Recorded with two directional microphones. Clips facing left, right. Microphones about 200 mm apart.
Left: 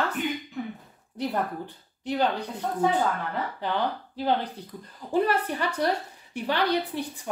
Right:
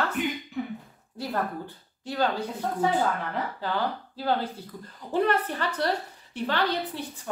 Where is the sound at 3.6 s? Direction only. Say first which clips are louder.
Left 2 dB; 20° left (ahead or behind).